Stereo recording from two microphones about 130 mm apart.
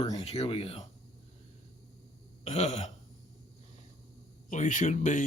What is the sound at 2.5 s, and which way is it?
Throat clearing, 60° left (ahead or behind).